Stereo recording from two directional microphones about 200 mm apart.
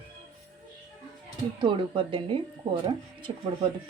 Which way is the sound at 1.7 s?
25° right (ahead or behind).